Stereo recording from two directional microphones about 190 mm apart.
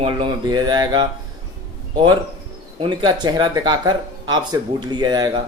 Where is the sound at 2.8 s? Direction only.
25° right (ahead or behind).